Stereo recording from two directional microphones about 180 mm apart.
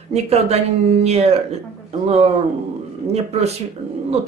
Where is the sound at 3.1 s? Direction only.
35° right (ahead or behind).